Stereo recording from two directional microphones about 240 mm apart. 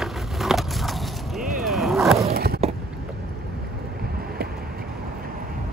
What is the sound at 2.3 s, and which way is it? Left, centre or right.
Skateboard, right.